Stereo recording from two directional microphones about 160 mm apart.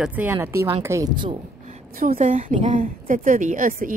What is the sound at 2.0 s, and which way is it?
A woman's voice, 55° right (ahead or behind).